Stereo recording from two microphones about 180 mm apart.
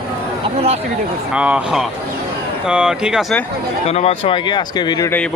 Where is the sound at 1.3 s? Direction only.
5° right (ahead or behind).